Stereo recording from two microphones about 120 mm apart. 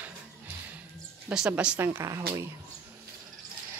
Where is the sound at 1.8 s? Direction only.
20° right (ahead or behind).